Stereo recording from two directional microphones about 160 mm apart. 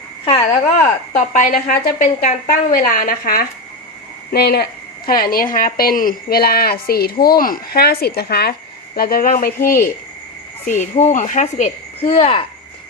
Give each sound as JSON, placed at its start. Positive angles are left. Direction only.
{"t": 1.1, "sound": "a woman's voice", "side_deg": 55}
{"t": 4.3, "sound": "a woman's voice", "side_deg": 85}
{"t": 9.0, "sound": "a woman's voice", "side_deg": 65}
{"t": 10.7, "sound": "speech", "side_deg": 45}